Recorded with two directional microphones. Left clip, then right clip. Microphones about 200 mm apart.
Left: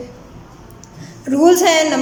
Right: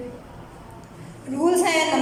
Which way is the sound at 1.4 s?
40° left (ahead or behind).